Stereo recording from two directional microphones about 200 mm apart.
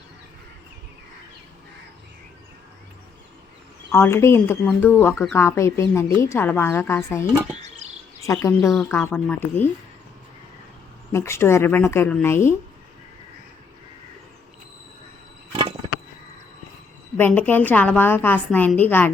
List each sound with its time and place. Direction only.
3.9 s a woman's voice: 15° left (ahead or behind)
7.8 s a sound: 35° right (ahead or behind)
8.3 s a woman's voice: 15° left (ahead or behind)
11.1 s a woman's voice: 10° left (ahead or behind)
17.2 s a woman's voice: 10° left (ahead or behind)